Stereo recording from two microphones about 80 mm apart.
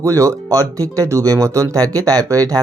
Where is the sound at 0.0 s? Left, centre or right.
Right.